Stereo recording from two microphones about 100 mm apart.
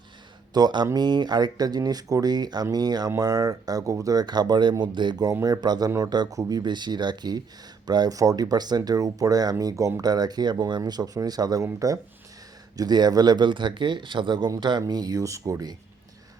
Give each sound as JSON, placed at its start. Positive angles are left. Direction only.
{"t": 0.5, "sound": "speech", "side_deg": -45}
{"t": 5.3, "sound": "speech", "side_deg": -30}
{"t": 5.5, "sound": "speech", "side_deg": -45}